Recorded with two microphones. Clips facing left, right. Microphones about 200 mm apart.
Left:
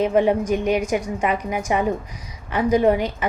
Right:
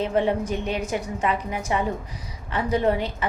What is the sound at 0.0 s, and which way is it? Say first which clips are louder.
A woman's voice: left 5 dB; 10° left (ahead or behind).